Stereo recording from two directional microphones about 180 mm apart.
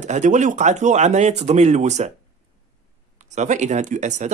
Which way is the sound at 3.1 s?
40° right (ahead or behind).